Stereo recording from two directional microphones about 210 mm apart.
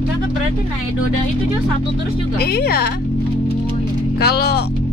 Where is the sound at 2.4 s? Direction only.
50° left (ahead or behind).